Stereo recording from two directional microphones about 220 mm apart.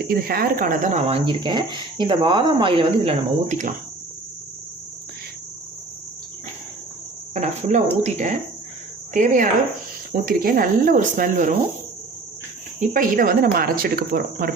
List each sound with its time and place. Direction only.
0.1 s speech: 45° right (ahead or behind)
7.3 s speech: 30° right (ahead or behind)
12.8 s speech: 40° right (ahead or behind)